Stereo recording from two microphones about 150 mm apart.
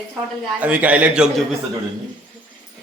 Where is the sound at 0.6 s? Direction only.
10° right (ahead or behind).